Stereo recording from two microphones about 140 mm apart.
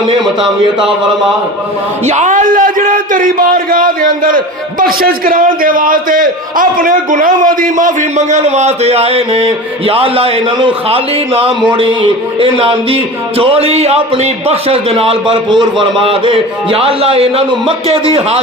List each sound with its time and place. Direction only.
2.0 s a man's voice: 60° right (ahead or behind); by 18.3 s 45° right (ahead or behind)